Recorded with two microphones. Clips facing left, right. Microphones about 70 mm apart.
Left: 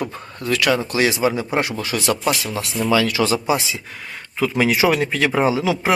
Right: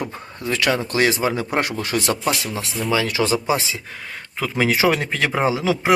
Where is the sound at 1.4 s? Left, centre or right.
Right.